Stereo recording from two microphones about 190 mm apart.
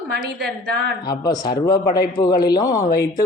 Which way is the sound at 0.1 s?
60° right (ahead or behind).